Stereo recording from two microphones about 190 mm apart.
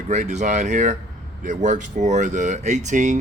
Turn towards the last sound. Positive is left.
turn(degrees=-40)  # may be behind; listen again after turning